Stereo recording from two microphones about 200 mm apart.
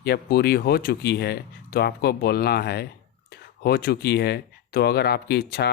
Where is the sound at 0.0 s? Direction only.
50° left (ahead or behind).